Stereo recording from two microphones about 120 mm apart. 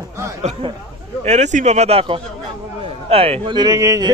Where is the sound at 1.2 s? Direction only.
70° right (ahead or behind); by 3.7 s 40° right (ahead or behind).